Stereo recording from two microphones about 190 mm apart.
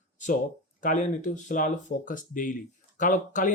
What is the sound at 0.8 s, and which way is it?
Speech, 40° left (ahead or behind).